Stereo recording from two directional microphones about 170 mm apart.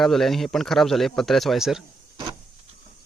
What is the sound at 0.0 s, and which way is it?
Speech, centre (ahead or behind).